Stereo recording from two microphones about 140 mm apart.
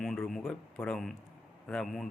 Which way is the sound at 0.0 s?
Centre (ahead or behind).